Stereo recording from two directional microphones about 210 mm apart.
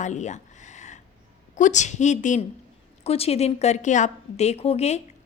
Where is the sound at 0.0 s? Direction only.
35° left (ahead or behind).